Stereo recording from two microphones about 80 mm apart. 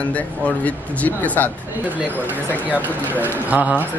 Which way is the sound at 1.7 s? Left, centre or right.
Centre.